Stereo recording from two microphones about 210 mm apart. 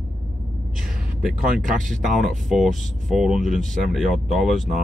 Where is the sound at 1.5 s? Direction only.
40° right (ahead or behind).